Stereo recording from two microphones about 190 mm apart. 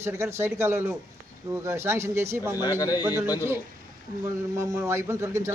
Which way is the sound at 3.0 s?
10° right (ahead or behind).